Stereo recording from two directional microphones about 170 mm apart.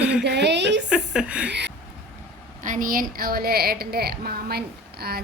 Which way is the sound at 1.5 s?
90° right.